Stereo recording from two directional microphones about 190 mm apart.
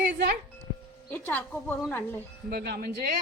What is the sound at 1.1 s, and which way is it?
Speech, 10° left (ahead or behind).